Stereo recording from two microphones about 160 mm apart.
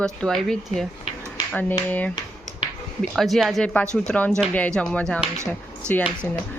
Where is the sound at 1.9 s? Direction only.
10° left (ahead or behind).